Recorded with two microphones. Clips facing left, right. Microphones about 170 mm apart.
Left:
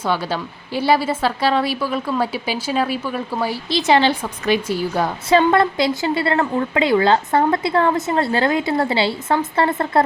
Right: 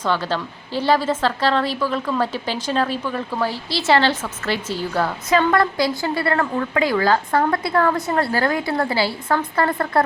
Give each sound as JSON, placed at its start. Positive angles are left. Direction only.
{"t": 0.0, "sound": "a woman's voice", "side_deg": 10}